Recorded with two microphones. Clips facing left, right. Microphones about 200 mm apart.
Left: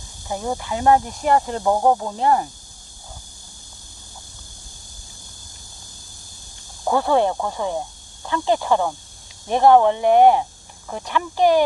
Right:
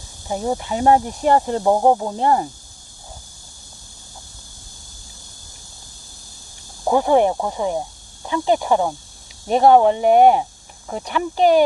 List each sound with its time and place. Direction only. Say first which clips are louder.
0.3 s speech: right 3 dB; 15° right (ahead or behind)
6.8 s speech: right 3 dB; 15° right (ahead or behind)